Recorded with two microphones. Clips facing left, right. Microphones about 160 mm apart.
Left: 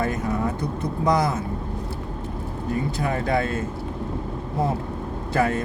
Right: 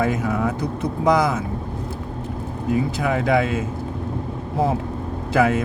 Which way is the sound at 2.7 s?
90° right.